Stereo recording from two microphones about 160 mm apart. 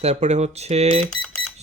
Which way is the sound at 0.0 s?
45° right (ahead or behind).